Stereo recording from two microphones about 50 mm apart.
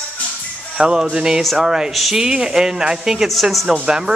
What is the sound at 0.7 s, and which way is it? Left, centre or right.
Speech, centre.